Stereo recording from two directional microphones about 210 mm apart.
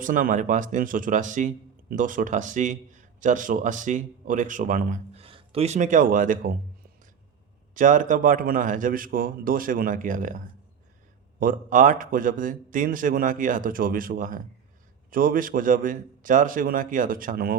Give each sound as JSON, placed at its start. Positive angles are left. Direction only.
{"t": 0.0, "sound": "a man's voice", "side_deg": -40}
{"t": 7.8, "sound": "a man's voice", "side_deg": -40}